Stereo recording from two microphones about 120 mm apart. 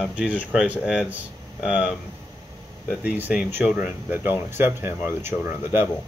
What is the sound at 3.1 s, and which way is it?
Speech, 15° right (ahead or behind).